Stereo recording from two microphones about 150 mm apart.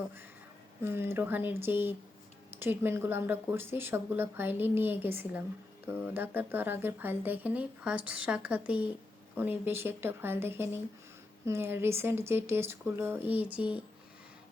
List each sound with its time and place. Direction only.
0.8 s speech: 15° right (ahead or behind)